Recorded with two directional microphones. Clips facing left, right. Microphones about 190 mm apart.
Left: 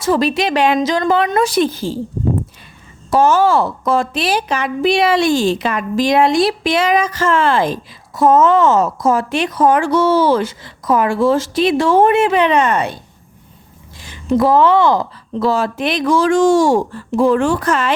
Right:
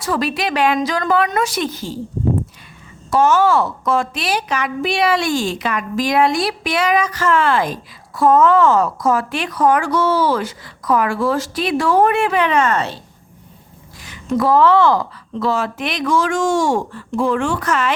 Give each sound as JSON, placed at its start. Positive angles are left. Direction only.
{"t": 0.0, "sound": "a woman's voice", "side_deg": 25}
{"t": 3.1, "sound": "a woman's voice", "side_deg": 30}
{"t": 14.3, "sound": "a woman's voice", "side_deg": 20}
{"t": 15.4, "sound": "speech", "side_deg": 35}